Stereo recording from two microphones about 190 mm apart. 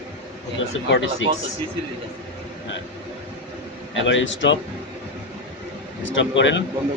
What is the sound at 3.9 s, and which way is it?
Speech, 75° left (ahead or behind).